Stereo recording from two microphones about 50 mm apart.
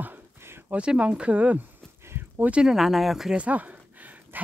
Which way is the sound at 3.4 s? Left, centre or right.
Right.